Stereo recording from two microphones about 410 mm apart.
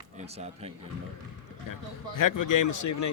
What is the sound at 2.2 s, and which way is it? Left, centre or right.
Speech, left.